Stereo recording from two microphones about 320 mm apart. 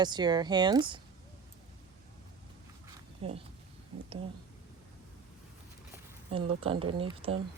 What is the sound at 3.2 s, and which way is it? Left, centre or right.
Speech, centre.